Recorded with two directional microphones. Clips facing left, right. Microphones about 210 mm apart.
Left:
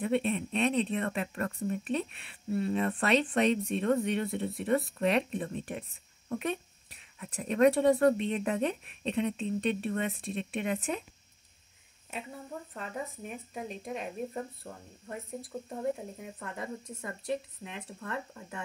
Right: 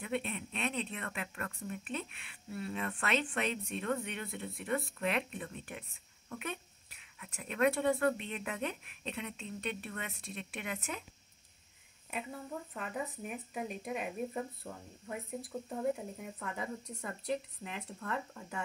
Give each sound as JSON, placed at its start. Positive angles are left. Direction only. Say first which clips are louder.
{"t": 0.0, "sound": "speech", "louder": "left 8 dB", "side_deg": 30}
{"t": 12.1, "sound": "speech", "louder": "even", "side_deg": 0}